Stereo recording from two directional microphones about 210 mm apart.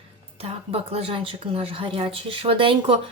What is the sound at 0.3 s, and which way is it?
Speech, 25° right (ahead or behind).